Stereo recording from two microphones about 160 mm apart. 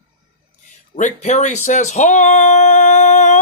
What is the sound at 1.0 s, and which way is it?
Speech, 50° left (ahead or behind).